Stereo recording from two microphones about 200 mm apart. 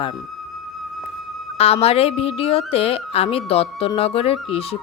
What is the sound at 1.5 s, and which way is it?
Speech, 30° left (ahead or behind).